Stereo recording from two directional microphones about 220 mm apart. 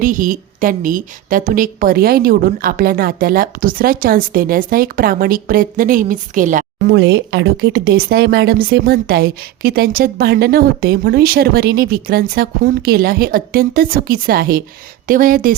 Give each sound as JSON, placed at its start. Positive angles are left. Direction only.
{"t": 0.0, "sound": "a woman's voice", "side_deg": -35}
{"t": 6.9, "sound": "a woman's voice", "side_deg": -50}